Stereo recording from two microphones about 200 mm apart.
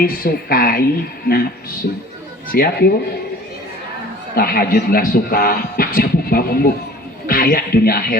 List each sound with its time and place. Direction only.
0.0 s speech: 45° left (ahead or behind)
2.5 s speech: 45° left (ahead or behind)
4.4 s speech: 50° left (ahead or behind)